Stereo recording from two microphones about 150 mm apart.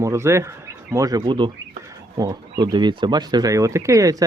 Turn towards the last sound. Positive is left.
turn(degrees=-20)  # may be behind; listen again after turning